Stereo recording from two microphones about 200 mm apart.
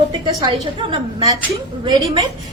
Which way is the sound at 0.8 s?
25° right (ahead or behind).